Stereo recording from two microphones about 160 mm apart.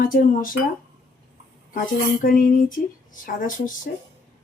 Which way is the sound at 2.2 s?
60° left (ahead or behind).